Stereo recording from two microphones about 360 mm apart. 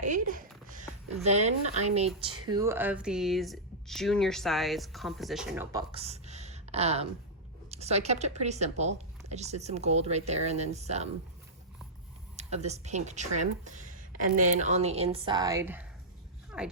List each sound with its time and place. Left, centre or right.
0.0 s speech: right
12.4 s speech: centre